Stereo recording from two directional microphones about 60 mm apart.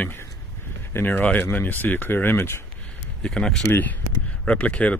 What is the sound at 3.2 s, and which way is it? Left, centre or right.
Speech, centre.